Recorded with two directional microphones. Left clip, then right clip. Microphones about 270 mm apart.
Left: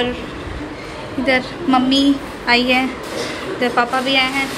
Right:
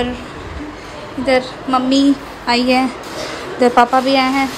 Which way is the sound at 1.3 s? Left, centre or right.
Centre.